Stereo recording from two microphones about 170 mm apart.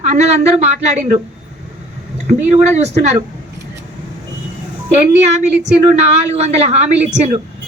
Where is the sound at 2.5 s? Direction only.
40° right (ahead or behind).